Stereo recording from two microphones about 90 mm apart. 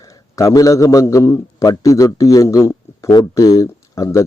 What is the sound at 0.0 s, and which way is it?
A man's voice, 35° left (ahead or behind).